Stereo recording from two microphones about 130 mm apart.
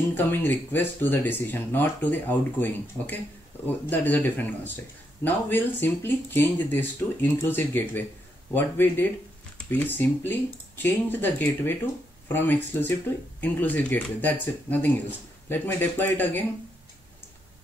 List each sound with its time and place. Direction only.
0.1 s speech: 15° left (ahead or behind)